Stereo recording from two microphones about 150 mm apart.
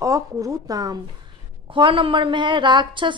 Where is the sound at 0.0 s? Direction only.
20° right (ahead or behind).